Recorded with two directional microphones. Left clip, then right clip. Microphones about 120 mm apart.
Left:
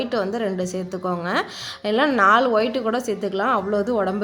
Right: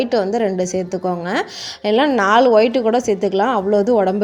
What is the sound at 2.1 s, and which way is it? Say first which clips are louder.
Speech: right 4 dB; 30° right (ahead or behind).